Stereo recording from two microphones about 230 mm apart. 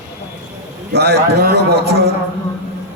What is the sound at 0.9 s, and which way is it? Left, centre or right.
A man's voice, right.